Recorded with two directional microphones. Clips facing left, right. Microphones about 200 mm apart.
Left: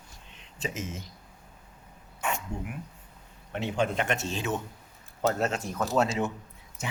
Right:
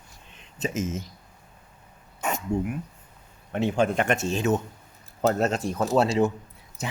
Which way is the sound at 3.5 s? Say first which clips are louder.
Right 5 dB; 50° right (ahead or behind).